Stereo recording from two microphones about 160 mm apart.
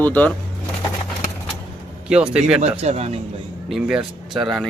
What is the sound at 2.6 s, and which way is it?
Speech, 45° right (ahead or behind).